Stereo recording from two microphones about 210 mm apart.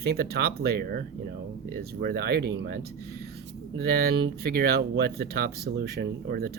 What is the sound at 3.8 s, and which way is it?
Speech, 50° right (ahead or behind).